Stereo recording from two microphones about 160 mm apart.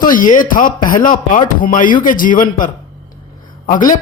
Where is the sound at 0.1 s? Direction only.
55° left (ahead or behind).